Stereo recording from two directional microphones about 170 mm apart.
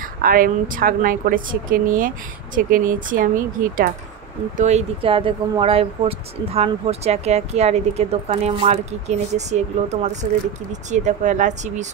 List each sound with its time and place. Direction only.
0.2 s speech: 55° right (ahead or behind)
4.6 s speech: 40° right (ahead or behind)